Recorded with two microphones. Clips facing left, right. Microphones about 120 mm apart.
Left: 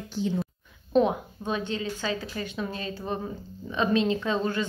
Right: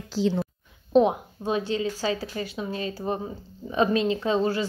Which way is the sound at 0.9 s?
30° right (ahead or behind).